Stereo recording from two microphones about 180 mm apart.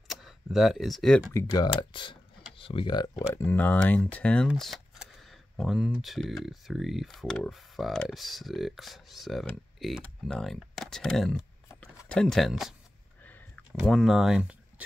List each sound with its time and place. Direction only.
0.1 s speech: centre (ahead or behind)
1.3 s speech: 20° left (ahead or behind)
3.3 s speech: 10° left (ahead or behind)
13.2 s a sound: 5° left (ahead or behind)